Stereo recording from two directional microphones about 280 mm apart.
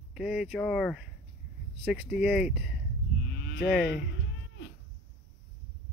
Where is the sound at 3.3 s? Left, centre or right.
Left.